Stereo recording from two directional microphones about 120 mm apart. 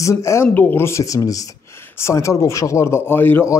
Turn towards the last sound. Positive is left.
turn(degrees=20)  # may be behind; listen again after turning